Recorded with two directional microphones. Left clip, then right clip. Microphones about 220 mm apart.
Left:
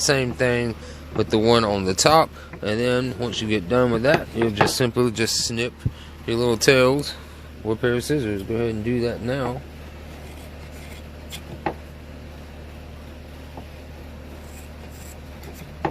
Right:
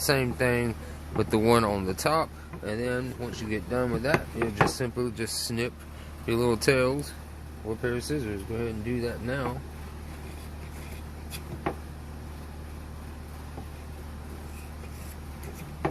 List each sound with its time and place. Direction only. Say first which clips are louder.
0.0 s speech: left 5 dB; 15° left (ahead or behind)
1.8 s speech: left 10 dB; 25° left (ahead or behind)
5.4 s speech: left 6 dB; 15° left (ahead or behind); by 9.6 s 40° left (ahead or behind)